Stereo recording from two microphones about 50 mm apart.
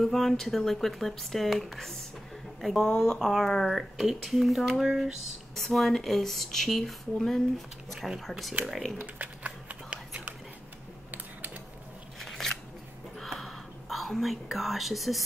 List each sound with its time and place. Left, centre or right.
0.0 s speech: centre
2.8 s speech: centre
9.0 s a sound: right
11.1 s mechanisms: right
12.2 s scissors: centre
13.2 s whispering: centre